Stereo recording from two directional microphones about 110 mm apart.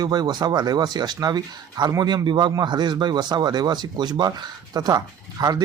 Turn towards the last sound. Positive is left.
turn(degrees=-35)  # may be behind; listen again after turning